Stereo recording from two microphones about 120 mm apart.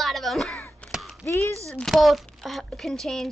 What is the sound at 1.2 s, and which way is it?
Speech, 25° left (ahead or behind).